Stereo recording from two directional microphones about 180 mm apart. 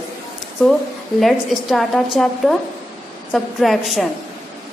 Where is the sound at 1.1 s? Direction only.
Centre (ahead or behind).